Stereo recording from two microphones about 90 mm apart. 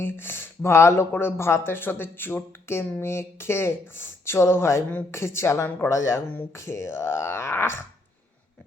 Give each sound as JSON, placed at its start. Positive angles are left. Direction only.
{"t": 0.0, "sound": "a woman's voice", "side_deg": 25}